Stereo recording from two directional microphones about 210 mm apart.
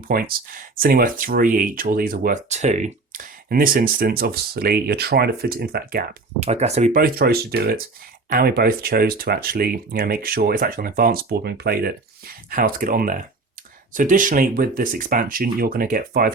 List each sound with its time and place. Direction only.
0.1 s speech: 45° right (ahead or behind)
6.4 s speech: 30° right (ahead or behind)